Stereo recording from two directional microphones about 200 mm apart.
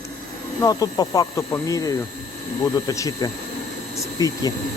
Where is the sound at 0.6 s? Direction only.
20° left (ahead or behind).